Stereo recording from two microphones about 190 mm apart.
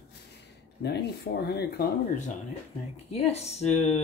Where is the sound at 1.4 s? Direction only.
55° left (ahead or behind).